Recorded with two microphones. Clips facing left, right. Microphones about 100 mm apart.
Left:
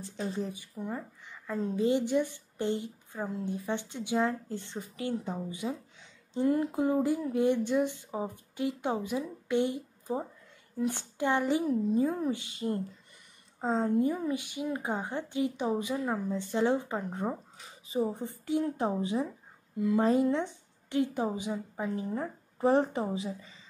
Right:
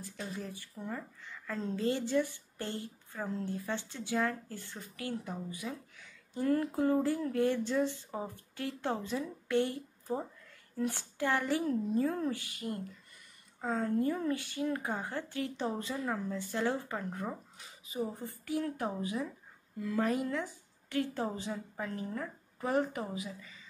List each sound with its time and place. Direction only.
0.0 s a woman's voice: 25° left (ahead or behind)